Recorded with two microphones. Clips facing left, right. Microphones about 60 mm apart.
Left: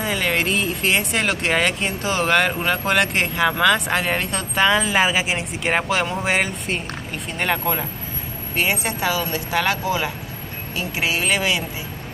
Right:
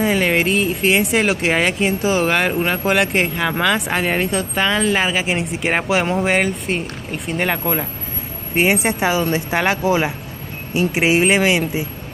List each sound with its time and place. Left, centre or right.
0.0 s speech: centre
8.5 s speech: right